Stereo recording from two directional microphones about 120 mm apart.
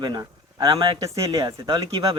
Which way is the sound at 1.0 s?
30° right (ahead or behind).